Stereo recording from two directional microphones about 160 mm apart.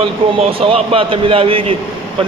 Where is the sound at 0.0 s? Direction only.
35° right (ahead or behind).